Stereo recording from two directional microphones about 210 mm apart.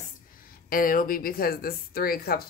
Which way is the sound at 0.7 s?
40° left (ahead or behind).